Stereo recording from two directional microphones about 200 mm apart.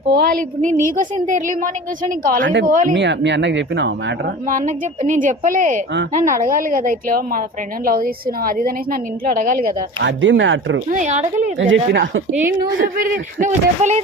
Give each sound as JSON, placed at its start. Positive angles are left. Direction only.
{"t": 0.1, "sound": "a woman's voice", "side_deg": -50}
{"t": 2.9, "sound": "speech", "side_deg": -60}
{"t": 4.4, "sound": "a woman's voice", "side_deg": -40}
{"t": 10.0, "sound": "speech", "side_deg": -65}
{"t": 10.8, "sound": "a woman's voice", "side_deg": -40}
{"t": 11.9, "sound": "speech", "side_deg": -60}
{"t": 12.3, "sound": "a woman's voice", "side_deg": -10}
{"t": 13.4, "sound": "a woman's voice", "side_deg": -35}